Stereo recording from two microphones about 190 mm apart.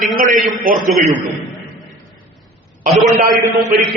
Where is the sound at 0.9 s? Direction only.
Centre (ahead or behind).